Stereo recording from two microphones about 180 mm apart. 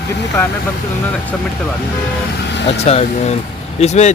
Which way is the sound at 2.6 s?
35° left (ahead or behind).